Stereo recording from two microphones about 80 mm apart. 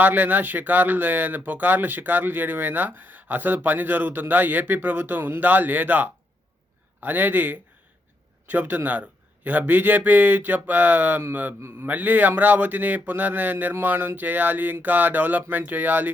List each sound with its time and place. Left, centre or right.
0.0 s speech: right